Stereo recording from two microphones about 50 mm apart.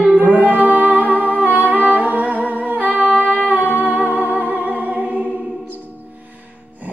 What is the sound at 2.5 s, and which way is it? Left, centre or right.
Humming, right.